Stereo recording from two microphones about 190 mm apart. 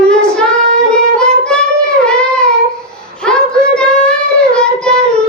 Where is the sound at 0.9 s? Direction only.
5° left (ahead or behind).